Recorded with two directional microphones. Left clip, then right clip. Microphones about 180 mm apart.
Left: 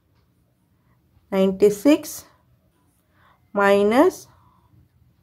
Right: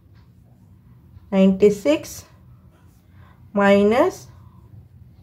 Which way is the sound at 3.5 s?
30° left (ahead or behind).